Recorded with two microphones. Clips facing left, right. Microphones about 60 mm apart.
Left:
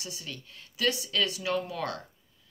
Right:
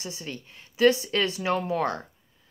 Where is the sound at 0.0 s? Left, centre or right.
Right.